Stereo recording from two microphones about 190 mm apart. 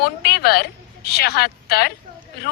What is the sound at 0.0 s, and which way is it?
A woman's voice, 55° left (ahead or behind).